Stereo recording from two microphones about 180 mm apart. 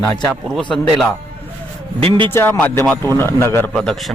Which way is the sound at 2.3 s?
10° left (ahead or behind).